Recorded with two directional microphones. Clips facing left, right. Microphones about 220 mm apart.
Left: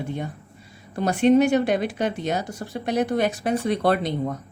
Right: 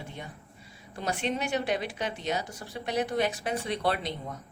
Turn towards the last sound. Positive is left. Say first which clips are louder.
# left 8 dB
turn(degrees=50)  # may be behind; listen again after turning